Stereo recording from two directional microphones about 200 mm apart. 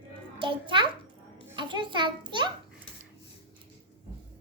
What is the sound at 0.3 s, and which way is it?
A child's voice, 25° right (ahead or behind).